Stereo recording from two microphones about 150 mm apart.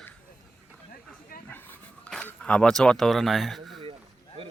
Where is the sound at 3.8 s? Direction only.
35° right (ahead or behind).